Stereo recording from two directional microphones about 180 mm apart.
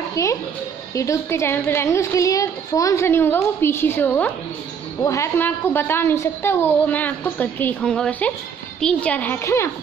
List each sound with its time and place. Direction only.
0.1 s a child's voice: 15° left (ahead or behind)